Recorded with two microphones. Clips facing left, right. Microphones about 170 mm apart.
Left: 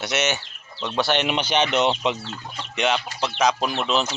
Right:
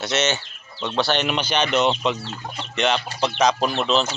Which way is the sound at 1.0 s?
15° left (ahead or behind).